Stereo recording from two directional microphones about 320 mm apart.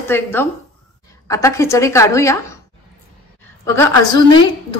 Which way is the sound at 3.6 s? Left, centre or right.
Centre.